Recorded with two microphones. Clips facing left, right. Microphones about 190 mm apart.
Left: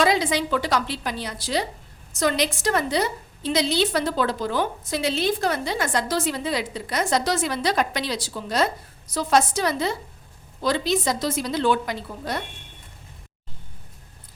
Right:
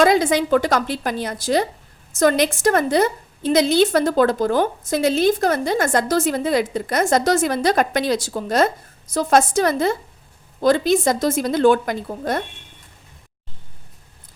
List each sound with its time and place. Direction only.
0.0 s a woman's voice: 50° right (ahead or behind)